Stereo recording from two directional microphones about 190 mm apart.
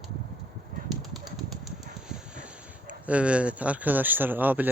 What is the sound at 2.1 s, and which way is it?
Speech, 5° right (ahead or behind).